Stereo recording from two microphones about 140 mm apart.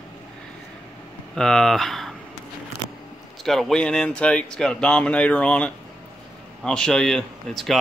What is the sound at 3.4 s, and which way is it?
Speech, centre (ahead or behind).